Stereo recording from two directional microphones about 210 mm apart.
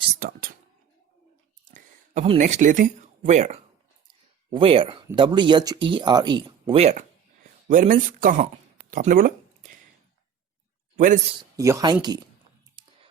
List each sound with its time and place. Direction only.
0.2 s speech: 45° right (ahead or behind)
1.6 s a sound: 40° right (ahead or behind)
2.4 s speech: 35° right (ahead or behind)
10.9 s a man's voice: 40° right (ahead or behind)
11.5 s speech: 15° right (ahead or behind)
12.8 s a sound: 20° right (ahead or behind)